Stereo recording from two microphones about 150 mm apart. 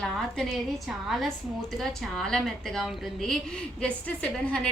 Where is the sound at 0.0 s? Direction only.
Centre (ahead or behind).